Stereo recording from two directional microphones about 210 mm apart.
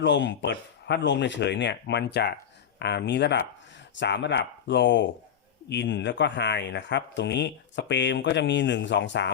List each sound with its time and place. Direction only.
0.0 s speech: 60° left (ahead or behind)